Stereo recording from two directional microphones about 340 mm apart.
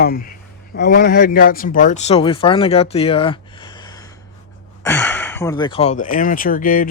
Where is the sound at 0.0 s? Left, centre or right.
Left.